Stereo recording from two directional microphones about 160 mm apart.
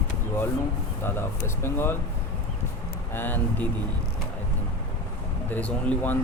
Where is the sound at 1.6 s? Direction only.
15° left (ahead or behind).